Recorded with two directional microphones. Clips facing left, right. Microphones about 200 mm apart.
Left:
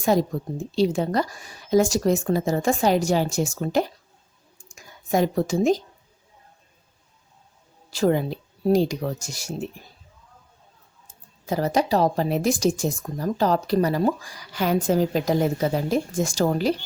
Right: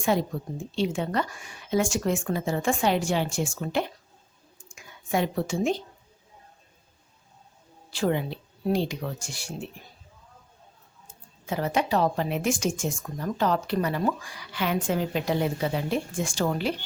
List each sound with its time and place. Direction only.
0.0 s a woman's voice: 40° left (ahead or behind)
7.9 s speech: 40° left (ahead or behind)
11.4 s speech: 40° left (ahead or behind)